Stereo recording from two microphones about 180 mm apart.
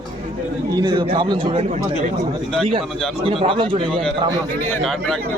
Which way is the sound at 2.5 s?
5° left (ahead or behind).